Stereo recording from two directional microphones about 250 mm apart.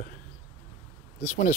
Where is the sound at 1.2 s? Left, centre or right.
Left.